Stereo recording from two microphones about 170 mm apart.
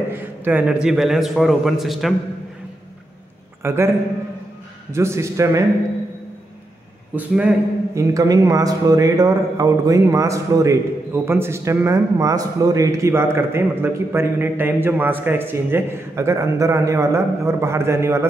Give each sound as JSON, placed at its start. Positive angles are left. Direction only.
{"t": 0.1, "sound": "a man's voice", "side_deg": -10}
{"t": 3.6, "sound": "a man's voice", "side_deg": -15}
{"t": 4.9, "sound": "a man's voice", "side_deg": -15}
{"t": 7.2, "sound": "a man's voice", "side_deg": -5}
{"t": 7.9, "sound": "a man's voice", "side_deg": -20}